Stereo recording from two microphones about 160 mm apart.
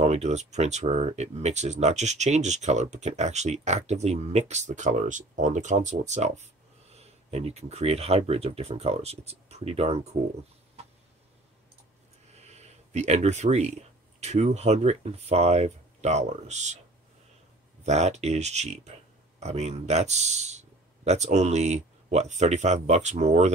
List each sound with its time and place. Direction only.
0.0 s speech: 45° right (ahead or behind)
12.4 s speech: 45° right (ahead or behind)
17.8 s speech: 45° right (ahead or behind)